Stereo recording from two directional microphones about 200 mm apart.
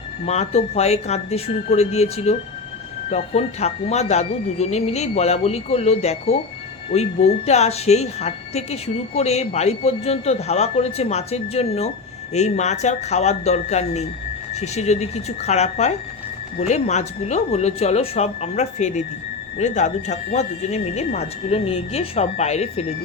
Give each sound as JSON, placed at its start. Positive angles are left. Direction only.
{"t": 0.3, "sound": "a woman's voice", "side_deg": 30}